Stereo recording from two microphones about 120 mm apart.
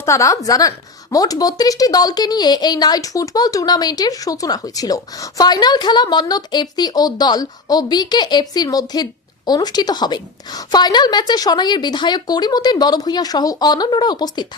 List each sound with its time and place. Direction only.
0.0 s a woman's voice: 25° left (ahead or behind)